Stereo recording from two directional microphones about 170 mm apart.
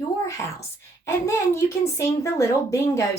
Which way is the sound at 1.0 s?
15° left (ahead or behind).